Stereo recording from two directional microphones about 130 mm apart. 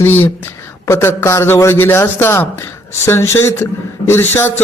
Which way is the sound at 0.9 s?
20° left (ahead or behind).